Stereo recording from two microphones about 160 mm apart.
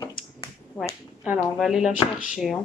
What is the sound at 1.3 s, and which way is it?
Speech, centre (ahead or behind).